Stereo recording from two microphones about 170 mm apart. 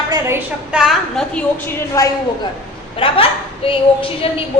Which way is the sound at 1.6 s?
15° left (ahead or behind).